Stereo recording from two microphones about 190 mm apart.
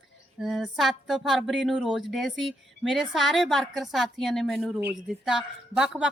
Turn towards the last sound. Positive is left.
turn(degrees=-5)  # may be behind; listen again after turning